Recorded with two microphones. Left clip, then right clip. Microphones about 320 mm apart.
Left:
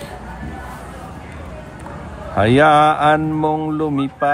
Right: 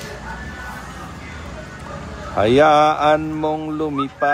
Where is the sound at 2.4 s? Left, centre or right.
Left.